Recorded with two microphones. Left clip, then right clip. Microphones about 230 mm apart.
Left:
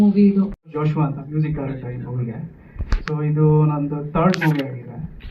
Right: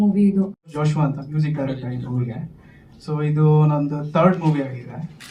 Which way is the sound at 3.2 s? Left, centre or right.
Right.